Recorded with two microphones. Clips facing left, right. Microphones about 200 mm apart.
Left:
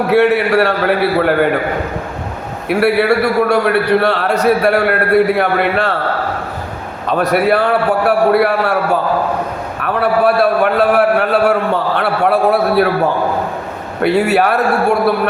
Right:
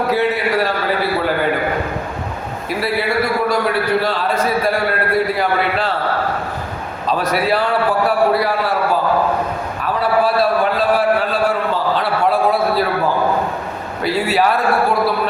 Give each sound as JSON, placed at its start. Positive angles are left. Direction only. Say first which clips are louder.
{"t": 0.1, "sound": "a man's voice", "louder": "left 9 dB", "side_deg": 65}
{"t": 2.6, "sound": "a man's voice", "louder": "left 8 dB", "side_deg": 65}
{"t": 7.1, "sound": "a man's voice", "louder": "left 5 dB", "side_deg": 60}
{"t": 9.8, "sound": "a sound", "louder": "left 4 dB", "side_deg": 60}
{"t": 14.0, "sound": "a man's voice", "louder": "left 4 dB", "side_deg": 65}